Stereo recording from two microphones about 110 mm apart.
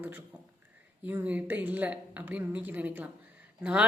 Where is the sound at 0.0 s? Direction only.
15° right (ahead or behind).